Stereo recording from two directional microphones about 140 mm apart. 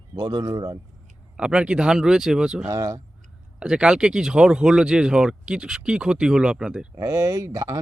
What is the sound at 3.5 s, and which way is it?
Speech, 5° right (ahead or behind).